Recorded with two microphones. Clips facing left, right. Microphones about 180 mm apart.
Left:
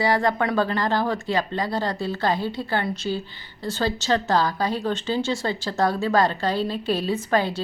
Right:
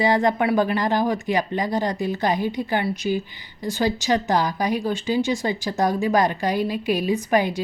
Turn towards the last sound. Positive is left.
turn(degrees=-15)  # may be behind; listen again after turning